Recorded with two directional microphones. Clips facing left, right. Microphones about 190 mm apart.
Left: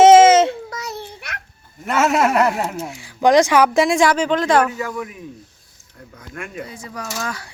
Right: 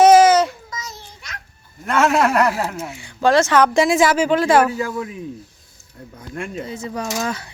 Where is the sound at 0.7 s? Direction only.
60° left (ahead or behind).